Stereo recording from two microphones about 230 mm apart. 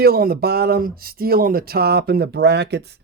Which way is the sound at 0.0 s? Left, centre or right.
Right.